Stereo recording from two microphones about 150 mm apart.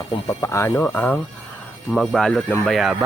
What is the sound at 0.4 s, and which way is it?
Speech, 20° left (ahead or behind).